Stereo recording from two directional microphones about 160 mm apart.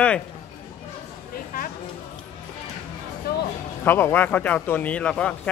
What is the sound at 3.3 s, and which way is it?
Music, 85° left.